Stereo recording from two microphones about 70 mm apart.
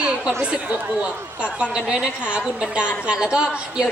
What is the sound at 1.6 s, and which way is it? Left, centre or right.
A woman's voice, centre.